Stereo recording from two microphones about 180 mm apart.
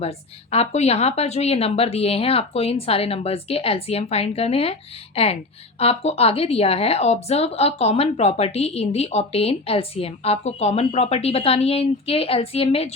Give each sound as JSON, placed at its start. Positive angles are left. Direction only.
{"t": 0.5, "sound": "speech", "side_deg": 35}